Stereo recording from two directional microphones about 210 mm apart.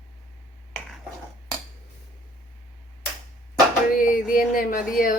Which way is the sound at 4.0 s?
40° left (ahead or behind).